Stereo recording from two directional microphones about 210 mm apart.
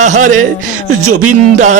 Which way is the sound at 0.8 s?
90° right.